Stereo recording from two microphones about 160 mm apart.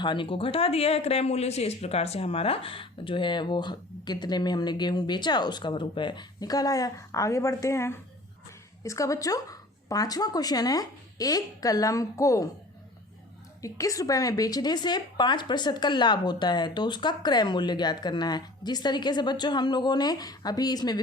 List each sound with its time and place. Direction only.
0.0 s speech: 30° left (ahead or behind)
13.6 s speech: 20° left (ahead or behind)